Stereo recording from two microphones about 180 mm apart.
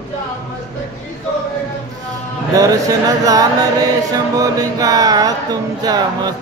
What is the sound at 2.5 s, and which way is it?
Music, 20° right (ahead or behind).